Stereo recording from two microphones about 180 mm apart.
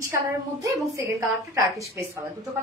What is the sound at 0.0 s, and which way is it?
A woman's voice, 15° right (ahead or behind).